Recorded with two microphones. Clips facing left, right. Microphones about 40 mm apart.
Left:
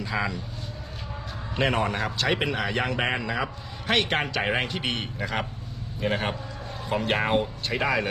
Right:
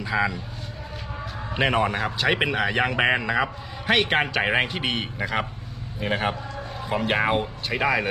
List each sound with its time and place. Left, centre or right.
0.0 s speech: centre
1.5 s speech: centre